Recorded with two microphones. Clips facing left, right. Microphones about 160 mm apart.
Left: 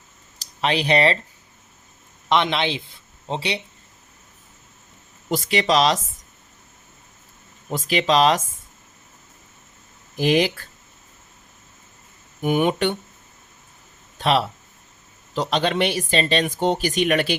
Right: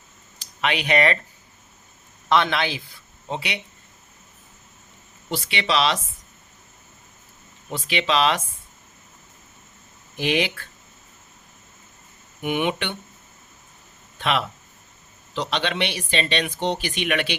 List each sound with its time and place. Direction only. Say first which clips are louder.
0.3 s speech: left 3 dB; 35° left (ahead or behind)
2.3 s speech: left 1 dB; 20° left (ahead or behind)
5.3 s speech: left 5 dB; 40° left (ahead or behind)
7.7 s speech: left 4 dB; 40° left (ahead or behind)
10.2 s speech: left 4 dB; 40° left (ahead or behind)
12.4 s speech: left 5 dB; 40° left (ahead or behind)
14.2 s speech: left 4 dB; 35° left (ahead or behind)